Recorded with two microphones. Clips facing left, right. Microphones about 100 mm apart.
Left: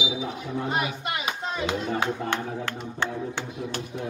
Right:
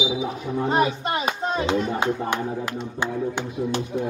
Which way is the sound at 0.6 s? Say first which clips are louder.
Right 8 dB; 35° right (ahead or behind).